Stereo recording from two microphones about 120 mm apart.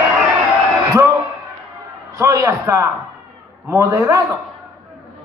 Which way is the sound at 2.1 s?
25° right (ahead or behind).